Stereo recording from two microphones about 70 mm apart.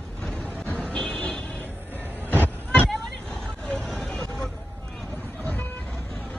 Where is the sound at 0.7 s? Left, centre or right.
Centre.